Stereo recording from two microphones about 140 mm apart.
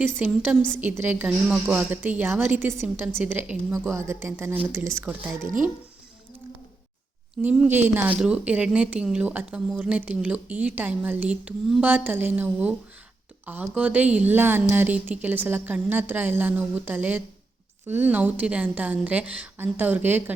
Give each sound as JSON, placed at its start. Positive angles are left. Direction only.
{"t": 0.2, "sound": "speech", "side_deg": -10}
{"t": 7.4, "sound": "speech", "side_deg": -10}